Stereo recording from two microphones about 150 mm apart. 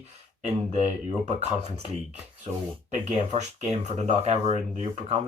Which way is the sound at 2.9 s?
50° right (ahead or behind).